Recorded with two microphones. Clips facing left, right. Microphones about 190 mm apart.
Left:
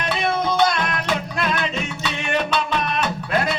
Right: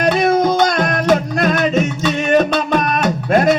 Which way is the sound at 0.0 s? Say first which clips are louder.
Right 9 dB; 45° right (ahead or behind).